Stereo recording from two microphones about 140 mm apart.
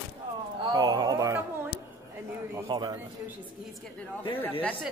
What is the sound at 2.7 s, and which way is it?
Speech, 30° right (ahead or behind).